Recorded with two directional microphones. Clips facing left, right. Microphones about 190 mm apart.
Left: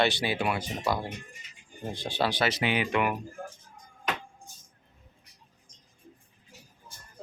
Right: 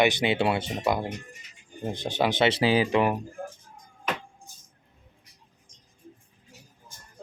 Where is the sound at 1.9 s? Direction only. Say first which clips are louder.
Right 3 dB; 20° right (ahead or behind).